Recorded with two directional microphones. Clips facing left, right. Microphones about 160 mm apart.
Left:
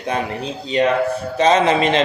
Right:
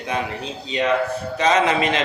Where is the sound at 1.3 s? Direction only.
30° left (ahead or behind).